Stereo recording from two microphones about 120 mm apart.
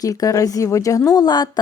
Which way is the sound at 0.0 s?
30° left (ahead or behind).